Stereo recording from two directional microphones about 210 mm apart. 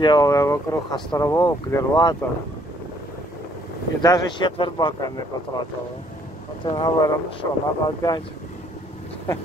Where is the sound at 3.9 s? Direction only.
20° left (ahead or behind).